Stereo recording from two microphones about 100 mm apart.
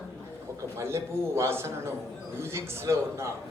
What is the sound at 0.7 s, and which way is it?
A man's voice, 30° right (ahead or behind).